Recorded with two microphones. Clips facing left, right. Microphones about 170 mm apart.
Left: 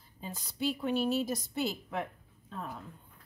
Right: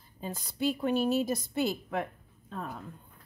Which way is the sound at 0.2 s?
50° right (ahead or behind).